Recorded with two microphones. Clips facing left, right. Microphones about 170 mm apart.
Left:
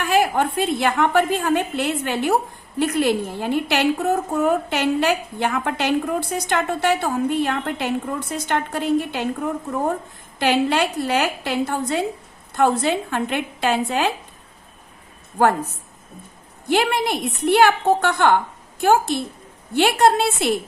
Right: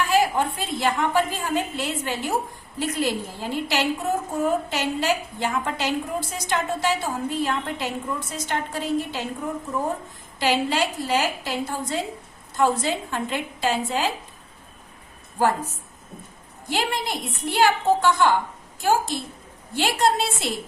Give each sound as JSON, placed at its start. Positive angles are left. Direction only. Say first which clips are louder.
{"t": 0.0, "sound": "a woman's voice", "louder": "left 2 dB", "side_deg": 60}
{"t": 16.6, "sound": "a woman's voice", "louder": "left 7 dB", "side_deg": 60}